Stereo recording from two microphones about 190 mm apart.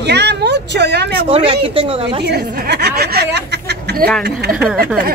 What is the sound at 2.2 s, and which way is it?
Speech, 60° right (ahead or behind).